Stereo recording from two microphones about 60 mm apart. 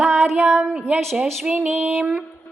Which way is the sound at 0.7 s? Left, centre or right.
Centre.